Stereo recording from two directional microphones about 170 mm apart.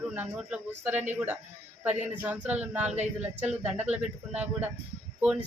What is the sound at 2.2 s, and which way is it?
Speech, 10° right (ahead or behind).